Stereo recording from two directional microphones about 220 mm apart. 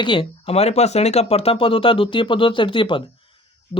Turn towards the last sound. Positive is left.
turn(degrees=20)  # may be behind; listen again after turning